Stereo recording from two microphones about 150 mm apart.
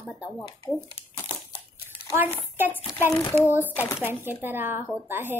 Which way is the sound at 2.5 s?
10° right (ahead or behind).